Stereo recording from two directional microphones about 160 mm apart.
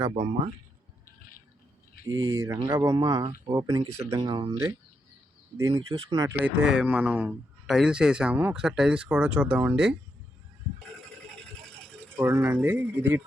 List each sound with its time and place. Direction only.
0.1 s speech: 40° right (ahead or behind)
2.0 s speech: 20° right (ahead or behind)
6.4 s speech: 5° right (ahead or behind)
11.4 s a sound: 5° left (ahead or behind)
12.1 s speech: 15° right (ahead or behind)